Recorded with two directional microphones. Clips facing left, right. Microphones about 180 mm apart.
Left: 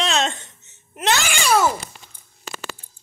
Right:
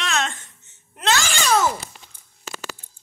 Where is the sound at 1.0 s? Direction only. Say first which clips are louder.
Left 1 dB; 20° left (ahead or behind).